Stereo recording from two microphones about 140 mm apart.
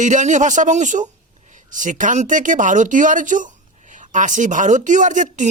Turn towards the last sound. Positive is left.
turn(degrees=-60)  # may be behind; listen again after turning